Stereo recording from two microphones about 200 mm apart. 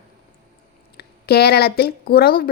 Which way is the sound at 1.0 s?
50° left (ahead or behind).